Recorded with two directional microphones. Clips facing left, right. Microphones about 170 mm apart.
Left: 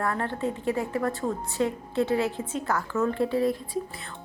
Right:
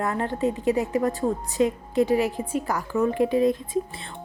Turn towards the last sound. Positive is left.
turn(degrees=-20)  # may be behind; listen again after turning